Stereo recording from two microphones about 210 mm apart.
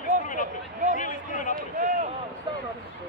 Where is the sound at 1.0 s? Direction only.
40° left (ahead or behind).